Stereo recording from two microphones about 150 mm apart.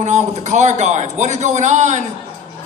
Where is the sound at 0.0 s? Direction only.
50° right (ahead or behind).